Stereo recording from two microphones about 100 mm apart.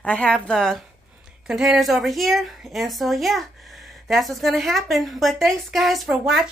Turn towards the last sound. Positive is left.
turn(degrees=-5)  # may be behind; listen again after turning